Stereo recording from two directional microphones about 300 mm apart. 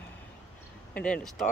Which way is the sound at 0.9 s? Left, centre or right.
Centre.